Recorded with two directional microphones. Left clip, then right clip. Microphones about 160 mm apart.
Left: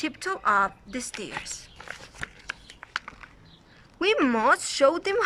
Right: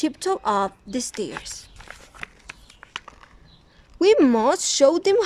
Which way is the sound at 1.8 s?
Centre (ahead or behind).